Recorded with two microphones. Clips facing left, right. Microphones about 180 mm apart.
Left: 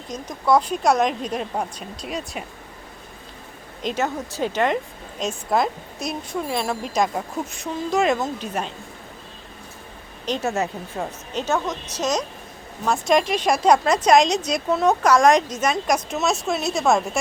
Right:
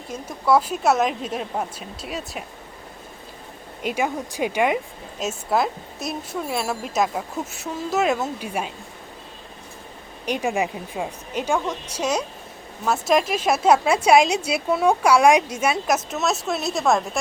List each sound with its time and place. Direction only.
0.1 s speech: 5° right (ahead or behind)
3.8 s a woman's voice: 10° right (ahead or behind)
10.2 s a woman's voice: 10° right (ahead or behind)